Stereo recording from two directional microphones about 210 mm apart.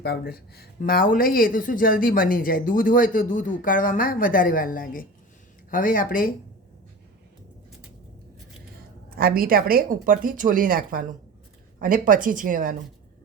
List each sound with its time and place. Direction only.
0.0 s speech: 50° left (ahead or behind)
9.0 s a woman's voice: 45° right (ahead or behind)